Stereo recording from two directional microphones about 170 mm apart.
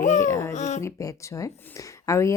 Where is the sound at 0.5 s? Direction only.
45° left (ahead or behind).